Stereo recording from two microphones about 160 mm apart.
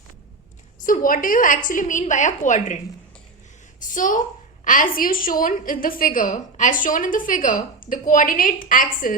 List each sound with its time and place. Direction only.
0.8 s a woman's voice: 55° left (ahead or behind)
3.8 s a sound: 55° left (ahead or behind)
4.6 s a woman's voice: 55° left (ahead or behind)